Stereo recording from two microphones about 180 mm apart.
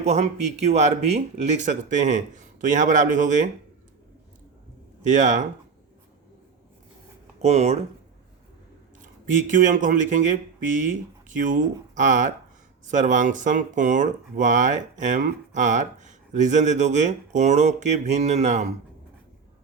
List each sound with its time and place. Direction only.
0.0 s speech: 40° right (ahead or behind)
5.0 s speech: 45° right (ahead or behind)
7.4 s speech: 40° right (ahead or behind)
9.5 s speech: 45° right (ahead or behind)